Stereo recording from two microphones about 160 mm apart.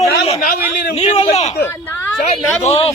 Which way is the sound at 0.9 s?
40° left (ahead or behind).